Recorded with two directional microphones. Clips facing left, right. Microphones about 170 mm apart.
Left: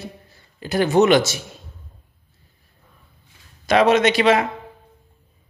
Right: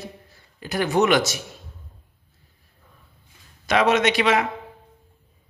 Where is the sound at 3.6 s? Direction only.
35° left (ahead or behind).